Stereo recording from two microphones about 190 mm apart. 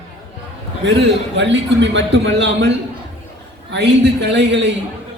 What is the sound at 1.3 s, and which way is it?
A man's voice, 75° right (ahead or behind).